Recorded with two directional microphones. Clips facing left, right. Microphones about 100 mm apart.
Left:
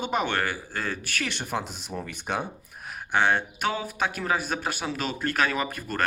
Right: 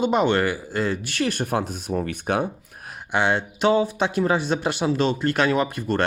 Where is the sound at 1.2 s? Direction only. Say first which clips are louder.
Right 7 dB; 45° right (ahead or behind).